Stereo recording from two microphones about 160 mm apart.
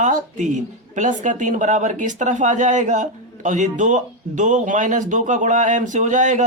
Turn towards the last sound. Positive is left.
turn(degrees=-50)  # may be behind; listen again after turning